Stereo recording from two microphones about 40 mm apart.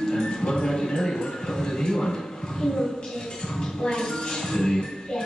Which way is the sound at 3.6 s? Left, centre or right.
Centre.